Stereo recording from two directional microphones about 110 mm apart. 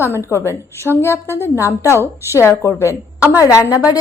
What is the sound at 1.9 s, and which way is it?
Speech, 25° right (ahead or behind).